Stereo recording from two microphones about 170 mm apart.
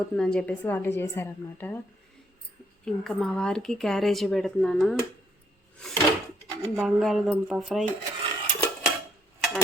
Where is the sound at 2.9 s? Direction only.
5° left (ahead or behind).